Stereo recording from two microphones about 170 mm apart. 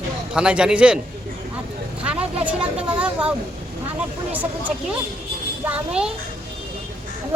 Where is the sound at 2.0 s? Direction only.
5° right (ahead or behind).